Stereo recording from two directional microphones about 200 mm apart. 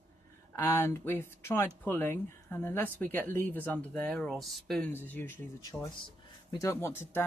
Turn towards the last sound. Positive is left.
turn(degrees=10)  # may be behind; listen again after turning